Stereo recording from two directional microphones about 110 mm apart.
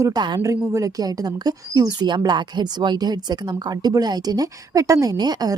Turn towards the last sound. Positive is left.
turn(degrees=-35)  # may be behind; listen again after turning